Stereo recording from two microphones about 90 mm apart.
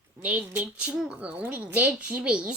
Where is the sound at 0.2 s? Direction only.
15° right (ahead or behind).